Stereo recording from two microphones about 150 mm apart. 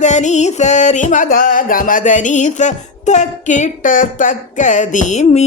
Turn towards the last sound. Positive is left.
turn(degrees=50)  # may be behind; listen again after turning